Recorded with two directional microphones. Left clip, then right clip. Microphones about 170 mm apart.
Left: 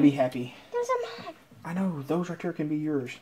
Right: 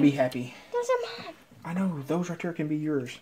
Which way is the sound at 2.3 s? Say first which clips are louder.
Even; 20° right (ahead or behind).